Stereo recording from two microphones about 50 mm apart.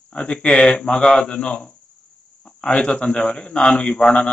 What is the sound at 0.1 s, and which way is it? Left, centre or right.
A man's voice, left.